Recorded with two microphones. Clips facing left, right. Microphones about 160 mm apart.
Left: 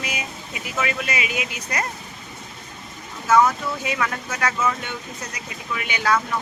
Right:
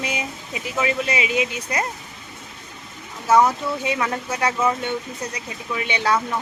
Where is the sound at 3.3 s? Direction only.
30° right (ahead or behind).